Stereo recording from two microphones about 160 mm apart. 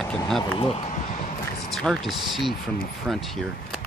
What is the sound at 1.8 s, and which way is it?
Speech, centre (ahead or behind).